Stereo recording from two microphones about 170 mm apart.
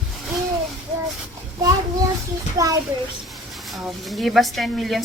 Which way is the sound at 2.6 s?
20° right (ahead or behind).